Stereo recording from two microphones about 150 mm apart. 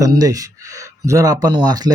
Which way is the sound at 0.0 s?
25° right (ahead or behind).